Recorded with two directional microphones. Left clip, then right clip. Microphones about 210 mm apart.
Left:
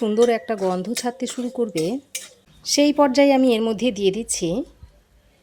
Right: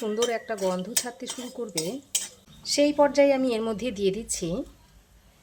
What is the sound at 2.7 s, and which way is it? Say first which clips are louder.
Speech: left 4 dB; 45° left (ahead or behind).